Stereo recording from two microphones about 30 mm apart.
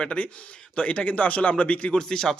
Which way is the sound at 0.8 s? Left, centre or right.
Left.